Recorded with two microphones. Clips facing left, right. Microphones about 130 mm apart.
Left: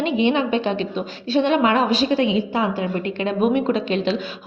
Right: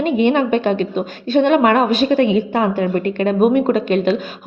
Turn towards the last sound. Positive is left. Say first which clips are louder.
# right 5 dB
turn(degrees=-50)  # may be behind; listen again after turning